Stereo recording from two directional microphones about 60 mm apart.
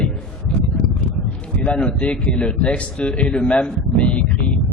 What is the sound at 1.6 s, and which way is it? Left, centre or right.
A man's voice, centre.